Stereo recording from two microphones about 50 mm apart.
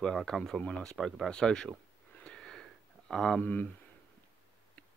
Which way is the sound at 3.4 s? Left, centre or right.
Left.